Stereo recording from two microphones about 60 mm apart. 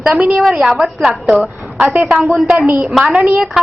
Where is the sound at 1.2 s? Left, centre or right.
Centre.